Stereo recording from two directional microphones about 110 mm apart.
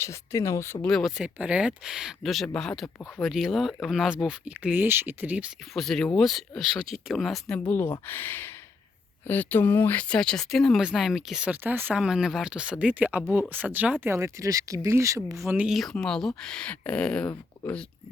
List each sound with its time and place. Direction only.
0.0 s speech: 25° left (ahead or behind)
0.9 s speech: centre (ahead or behind); by 5.5 s 15° right (ahead or behind)
5.7 s speech: 5° left (ahead or behind)
7.7 s speech: 20° left (ahead or behind); by 11.5 s 5° right (ahead or behind)
11.5 s speech: 20° right (ahead or behind)
12.0 s speech: 5° right (ahead or behind); by 15.4 s 30° right (ahead or behind)
15.4 s speech: 15° right (ahead or behind)
15.7 s speech: 5° left (ahead or behind)